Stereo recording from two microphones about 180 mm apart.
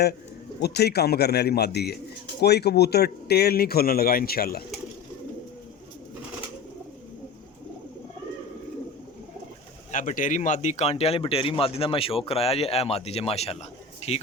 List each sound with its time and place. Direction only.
0.6 s speech: 65° left (ahead or behind)
9.9 s speech: 45° left (ahead or behind)
14.0 s a sound: 35° left (ahead or behind)